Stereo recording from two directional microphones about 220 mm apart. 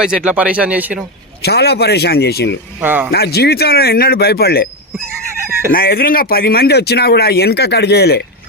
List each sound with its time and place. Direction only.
0.0 s speech: 5° right (ahead or behind)
1.4 s speech: 45° left (ahead or behind)
2.8 s speech: 10° right (ahead or behind)
3.1 s speech: 45° left (ahead or behind)
5.7 s speech: 45° left (ahead or behind)